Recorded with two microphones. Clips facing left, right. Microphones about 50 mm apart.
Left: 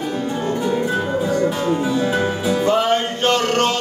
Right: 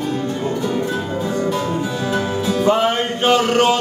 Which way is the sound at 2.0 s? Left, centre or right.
Centre.